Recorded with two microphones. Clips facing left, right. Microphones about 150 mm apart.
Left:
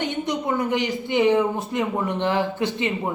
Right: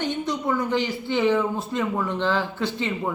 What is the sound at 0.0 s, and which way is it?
A man's voice, 20° left (ahead or behind).